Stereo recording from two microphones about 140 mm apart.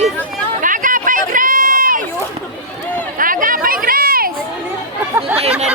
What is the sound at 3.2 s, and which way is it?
Chatter, 80° right.